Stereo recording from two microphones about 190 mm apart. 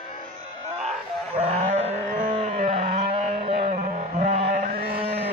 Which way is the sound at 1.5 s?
35° right (ahead or behind).